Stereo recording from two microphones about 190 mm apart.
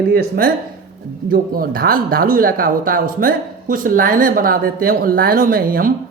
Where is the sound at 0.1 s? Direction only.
50° right (ahead or behind).